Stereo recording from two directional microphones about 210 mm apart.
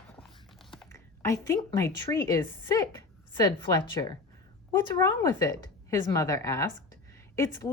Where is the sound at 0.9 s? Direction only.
15° left (ahead or behind).